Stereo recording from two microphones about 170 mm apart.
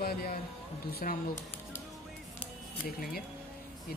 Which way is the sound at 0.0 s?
60° left (ahead or behind).